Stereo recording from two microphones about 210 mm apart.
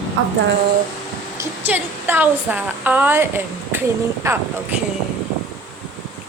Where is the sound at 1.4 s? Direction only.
10° right (ahead or behind).